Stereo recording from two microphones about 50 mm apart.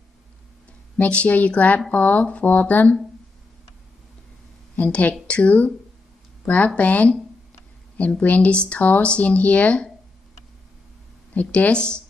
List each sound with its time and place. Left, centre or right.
0.9 s speech: left
4.7 s speech: left
11.3 s speech: left